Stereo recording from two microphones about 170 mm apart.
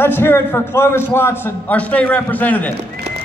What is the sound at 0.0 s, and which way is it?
A man's voice, 15° left (ahead or behind).